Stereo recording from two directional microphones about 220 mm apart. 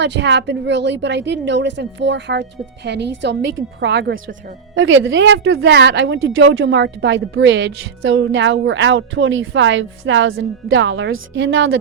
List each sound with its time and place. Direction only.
0.0 s a woman's voice: 50° right (ahead or behind)
4.7 s speech: 60° right (ahead or behind)